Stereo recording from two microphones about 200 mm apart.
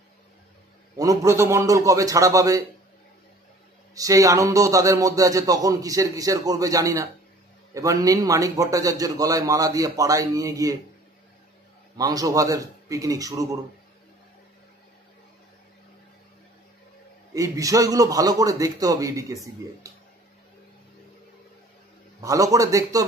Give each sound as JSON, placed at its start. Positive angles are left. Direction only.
{"t": 0.9, "sound": "speech", "side_deg": -15}
{"t": 3.9, "sound": "speech", "side_deg": -15}
{"t": 12.0, "sound": "speech", "side_deg": -20}
{"t": 17.3, "sound": "speech", "side_deg": -15}
{"t": 22.2, "sound": "speech", "side_deg": -15}